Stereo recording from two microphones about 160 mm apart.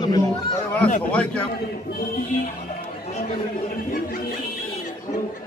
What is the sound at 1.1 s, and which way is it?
Speech, 5° left (ahead or behind).